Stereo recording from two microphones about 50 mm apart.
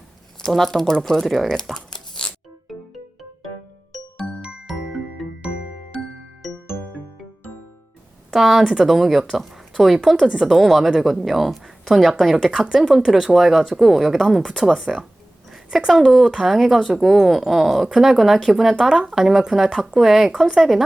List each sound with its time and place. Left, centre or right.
0.4 s speech: centre
2.2 s music: centre
4.4 s music: right
4.6 s music: centre
8.3 s a woman's voice: centre
8.9 s speech: centre
12.5 s speech: centre
15.4 s a sound: centre
15.9 s speech: centre